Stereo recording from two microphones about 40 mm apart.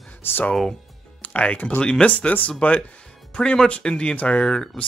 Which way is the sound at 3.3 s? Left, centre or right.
Left.